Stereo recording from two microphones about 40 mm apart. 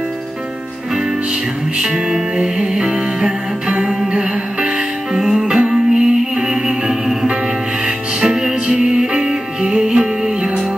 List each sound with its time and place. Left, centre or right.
1.8 s music: centre